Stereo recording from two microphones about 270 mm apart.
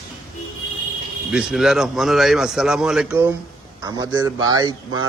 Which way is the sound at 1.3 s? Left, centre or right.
Centre.